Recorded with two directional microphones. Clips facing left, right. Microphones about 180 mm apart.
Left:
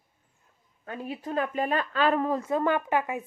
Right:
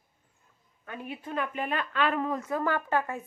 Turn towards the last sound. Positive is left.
turn(degrees=15)  # may be behind; listen again after turning